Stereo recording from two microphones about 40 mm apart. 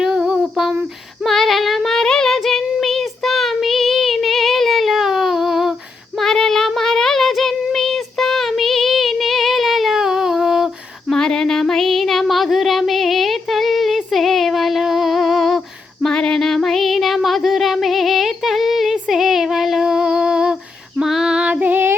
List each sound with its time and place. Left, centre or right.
0.0 s a sound: centre
1.2 s female singing: centre
2.0 s child singing: centre
6.1 s female singing: centre
6.7 s child singing: centre
11.1 s music: centre
16.0 s music: centre
17.2 s a sound: centre
19.1 s child singing: centre
19.8 s a sound: centre
21.0 s female singing: centre
21.3 s female singing: right
21.6 s female singing: right